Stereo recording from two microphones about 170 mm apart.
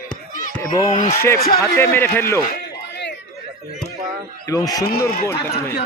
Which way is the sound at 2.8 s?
90° left.